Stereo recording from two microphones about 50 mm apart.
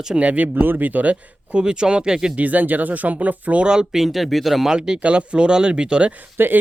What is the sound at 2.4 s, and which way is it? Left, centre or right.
Speech, right.